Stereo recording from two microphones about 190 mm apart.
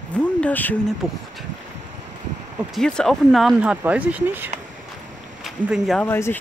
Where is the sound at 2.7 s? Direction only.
5° left (ahead or behind).